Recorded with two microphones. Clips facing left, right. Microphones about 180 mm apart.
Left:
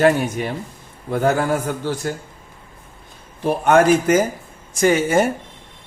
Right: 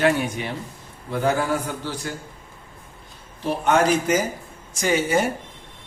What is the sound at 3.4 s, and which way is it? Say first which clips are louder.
Speech: left 5 dB; 50° left (ahead or behind).